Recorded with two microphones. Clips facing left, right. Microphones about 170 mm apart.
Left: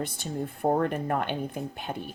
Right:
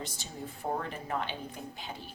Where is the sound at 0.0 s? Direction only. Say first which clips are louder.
Left 9 dB; 55° left (ahead or behind).